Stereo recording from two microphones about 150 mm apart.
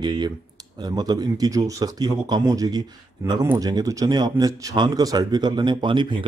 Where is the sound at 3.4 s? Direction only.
15° right (ahead or behind); by 6.2 s 30° right (ahead or behind).